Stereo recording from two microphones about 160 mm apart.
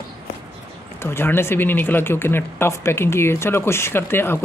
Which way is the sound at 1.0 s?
15° left (ahead or behind).